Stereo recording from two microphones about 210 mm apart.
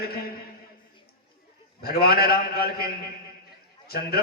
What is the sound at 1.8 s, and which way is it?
A man's voice, 45° left (ahead or behind).